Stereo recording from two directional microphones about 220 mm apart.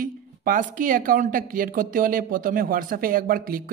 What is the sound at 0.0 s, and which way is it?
Speech, 35° right (ahead or behind).